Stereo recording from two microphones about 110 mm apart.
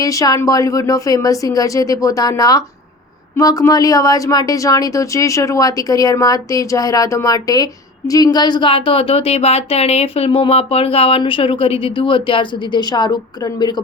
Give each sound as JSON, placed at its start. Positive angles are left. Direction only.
{"t": 0.0, "sound": "speech", "side_deg": 30}